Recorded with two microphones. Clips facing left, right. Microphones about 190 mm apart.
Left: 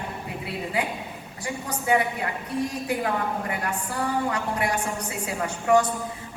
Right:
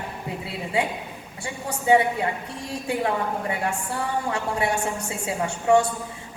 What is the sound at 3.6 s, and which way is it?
A woman's voice, 25° right (ahead or behind).